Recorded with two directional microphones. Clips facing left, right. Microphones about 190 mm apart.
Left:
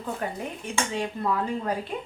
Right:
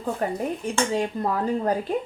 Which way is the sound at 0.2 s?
40° right (ahead or behind).